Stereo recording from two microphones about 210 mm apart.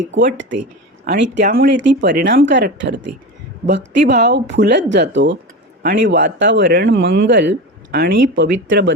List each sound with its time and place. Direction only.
0.6 s speech: 55° right (ahead or behind)